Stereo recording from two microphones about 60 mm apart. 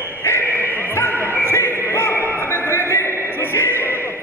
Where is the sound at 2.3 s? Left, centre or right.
Left.